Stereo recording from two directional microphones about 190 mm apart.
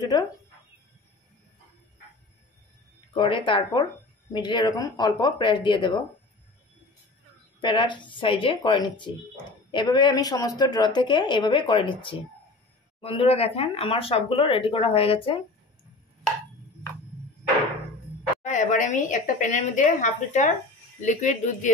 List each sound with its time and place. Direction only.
0.1 s speech: 20° left (ahead or behind)
3.1 s a woman's voice: 25° left (ahead or behind)
7.6 s a woman's voice: 25° left (ahead or behind)
18.4 s speech: 40° left (ahead or behind)